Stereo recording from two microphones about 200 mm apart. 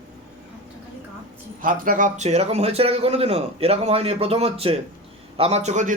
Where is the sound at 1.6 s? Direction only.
45° right (ahead or behind).